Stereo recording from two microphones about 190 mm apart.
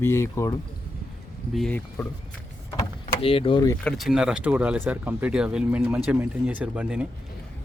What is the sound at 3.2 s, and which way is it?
Speech, 30° left (ahead or behind).